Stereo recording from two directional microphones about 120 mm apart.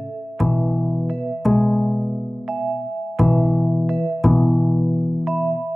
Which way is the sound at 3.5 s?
15° left (ahead or behind).